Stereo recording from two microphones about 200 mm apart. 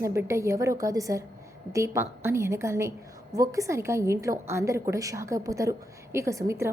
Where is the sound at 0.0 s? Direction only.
15° right (ahead or behind).